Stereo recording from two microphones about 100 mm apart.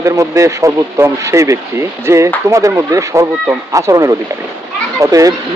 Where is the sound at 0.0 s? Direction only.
30° right (ahead or behind).